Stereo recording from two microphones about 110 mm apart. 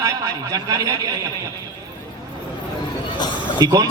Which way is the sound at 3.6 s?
40° right (ahead or behind).